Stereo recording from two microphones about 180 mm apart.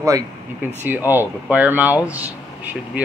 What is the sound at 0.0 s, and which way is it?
Speech, 15° right (ahead or behind).